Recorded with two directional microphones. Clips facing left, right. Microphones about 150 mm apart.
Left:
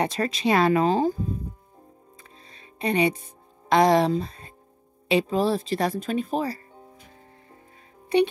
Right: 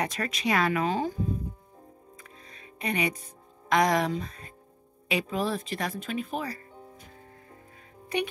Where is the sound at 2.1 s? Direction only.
30° left (ahead or behind).